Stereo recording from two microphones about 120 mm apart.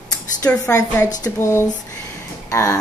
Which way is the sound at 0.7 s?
20° left (ahead or behind).